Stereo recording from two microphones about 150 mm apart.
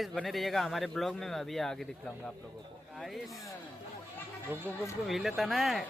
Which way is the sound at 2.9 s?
Centre (ahead or behind).